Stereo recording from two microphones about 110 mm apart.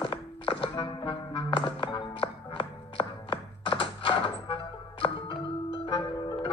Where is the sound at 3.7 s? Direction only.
55° left (ahead or behind).